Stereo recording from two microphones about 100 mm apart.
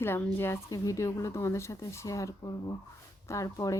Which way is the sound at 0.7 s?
35° left (ahead or behind).